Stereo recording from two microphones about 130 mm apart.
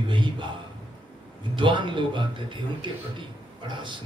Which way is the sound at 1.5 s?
40° right (ahead or behind).